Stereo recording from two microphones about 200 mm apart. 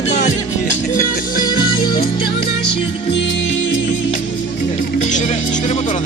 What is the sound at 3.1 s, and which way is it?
Music, 60° left (ahead or behind).